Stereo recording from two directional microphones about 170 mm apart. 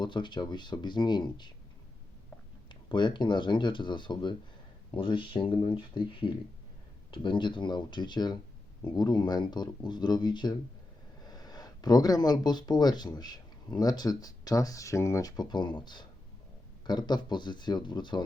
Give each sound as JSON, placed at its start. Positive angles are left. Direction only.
{"t": 0.0, "sound": "speech", "side_deg": 25}
{"t": 2.9, "sound": "speech", "side_deg": 25}